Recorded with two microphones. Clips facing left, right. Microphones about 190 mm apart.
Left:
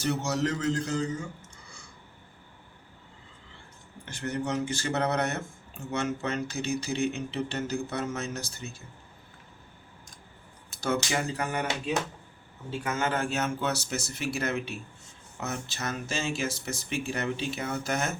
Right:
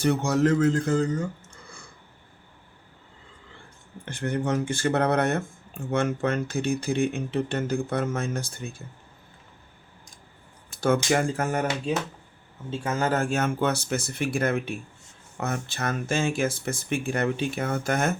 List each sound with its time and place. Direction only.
0.0 s a man's voice: 55° right (ahead or behind)
4.0 s speech: 55° right (ahead or behind)
10.7 s speech: 50° right (ahead or behind)
12.7 s speech: 30° right (ahead or behind); by 18.1 s 55° right (ahead or behind)